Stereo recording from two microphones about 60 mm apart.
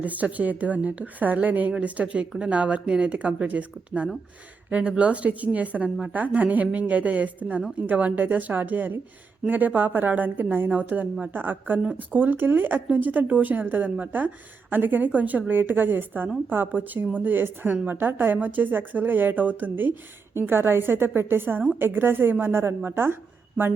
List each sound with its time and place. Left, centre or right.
0.0 s a woman's voice: right